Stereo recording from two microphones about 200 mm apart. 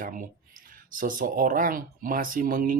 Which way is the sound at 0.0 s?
40° right (ahead or behind).